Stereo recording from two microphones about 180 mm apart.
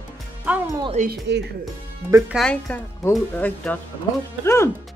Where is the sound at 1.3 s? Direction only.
70° right (ahead or behind).